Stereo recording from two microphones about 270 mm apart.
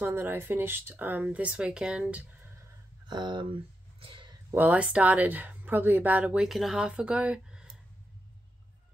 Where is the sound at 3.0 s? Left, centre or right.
Centre.